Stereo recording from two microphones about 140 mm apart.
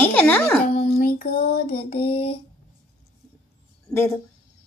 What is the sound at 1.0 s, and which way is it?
Music, 90° left.